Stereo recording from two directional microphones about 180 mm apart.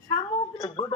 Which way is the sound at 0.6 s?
20° left (ahead or behind).